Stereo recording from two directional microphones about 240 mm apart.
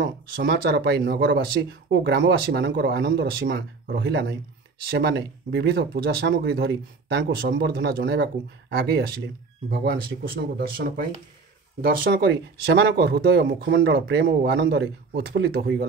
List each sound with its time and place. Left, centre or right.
0.0 s speech: right
10.6 s speech: right